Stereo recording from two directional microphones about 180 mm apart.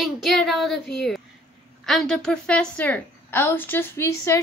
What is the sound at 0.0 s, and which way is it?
Child singing, centre (ahead or behind).